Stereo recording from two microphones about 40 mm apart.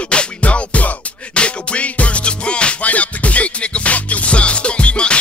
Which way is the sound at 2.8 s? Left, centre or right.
Left.